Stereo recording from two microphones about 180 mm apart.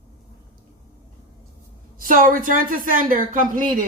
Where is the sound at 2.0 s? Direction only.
50° right (ahead or behind).